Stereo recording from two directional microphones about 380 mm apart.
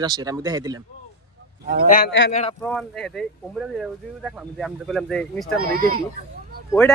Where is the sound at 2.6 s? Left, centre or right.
Centre.